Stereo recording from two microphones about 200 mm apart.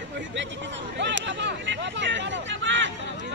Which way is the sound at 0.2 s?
65° right (ahead or behind).